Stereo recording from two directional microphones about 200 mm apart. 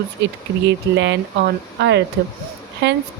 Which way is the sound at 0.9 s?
60° right (ahead or behind).